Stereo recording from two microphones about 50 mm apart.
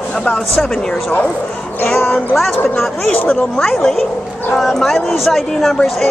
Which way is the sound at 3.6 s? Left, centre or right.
Centre.